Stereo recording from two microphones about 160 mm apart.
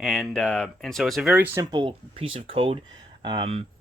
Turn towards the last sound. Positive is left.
turn(degrees=-35)  # may be behind; listen again after turning